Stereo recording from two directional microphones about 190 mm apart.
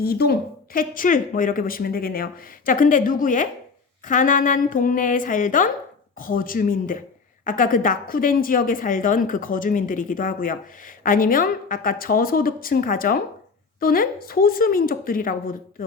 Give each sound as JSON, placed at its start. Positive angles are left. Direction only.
{"t": 0.0, "sound": "a woman's voice", "side_deg": 55}